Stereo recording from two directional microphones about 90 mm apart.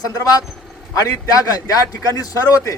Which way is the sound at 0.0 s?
45° left (ahead or behind).